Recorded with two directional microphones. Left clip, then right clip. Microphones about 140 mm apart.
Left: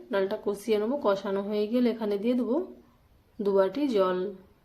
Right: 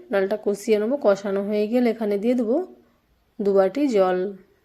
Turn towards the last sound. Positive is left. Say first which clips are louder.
# right 6 dB
turn(degrees=-35)  # may be behind; listen again after turning